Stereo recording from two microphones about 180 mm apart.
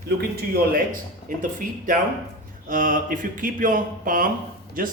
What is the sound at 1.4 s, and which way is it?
Speech, 50° right (ahead or behind).